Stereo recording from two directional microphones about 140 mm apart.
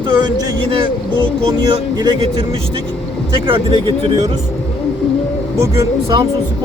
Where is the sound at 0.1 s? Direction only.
35° right (ahead or behind).